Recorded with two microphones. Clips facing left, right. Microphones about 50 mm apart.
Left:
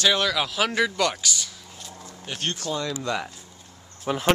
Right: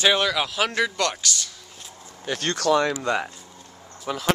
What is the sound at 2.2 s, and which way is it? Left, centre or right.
Speech, right.